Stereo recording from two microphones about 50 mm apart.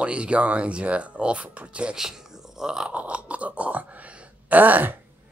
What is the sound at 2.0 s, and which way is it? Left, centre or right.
Speech, centre.